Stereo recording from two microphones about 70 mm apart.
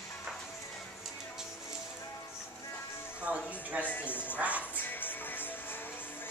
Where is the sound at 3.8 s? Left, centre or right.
Left.